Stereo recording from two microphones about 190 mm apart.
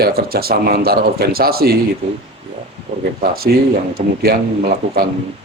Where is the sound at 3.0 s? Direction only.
50° right (ahead or behind).